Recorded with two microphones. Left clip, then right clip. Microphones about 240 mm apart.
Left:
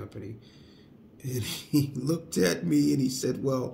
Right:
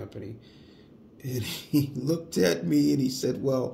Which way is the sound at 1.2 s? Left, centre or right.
Centre.